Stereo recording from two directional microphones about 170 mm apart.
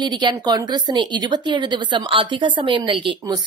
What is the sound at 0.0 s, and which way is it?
A woman's voice, 25° right (ahead or behind).